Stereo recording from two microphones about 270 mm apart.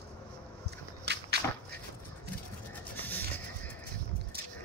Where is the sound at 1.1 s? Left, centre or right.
Right.